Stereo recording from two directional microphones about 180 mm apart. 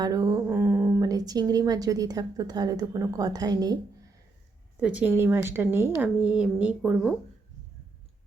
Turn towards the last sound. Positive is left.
turn(degrees=-5)  # may be behind; listen again after turning